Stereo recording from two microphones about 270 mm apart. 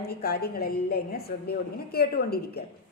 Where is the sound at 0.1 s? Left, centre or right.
Left.